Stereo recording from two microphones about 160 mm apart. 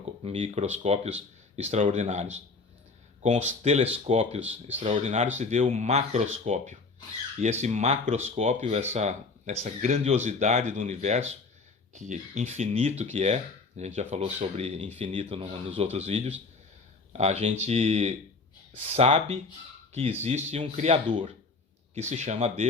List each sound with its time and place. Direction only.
0.2 s speech: 40° right (ahead or behind)
21.9 s speech: 45° right (ahead or behind)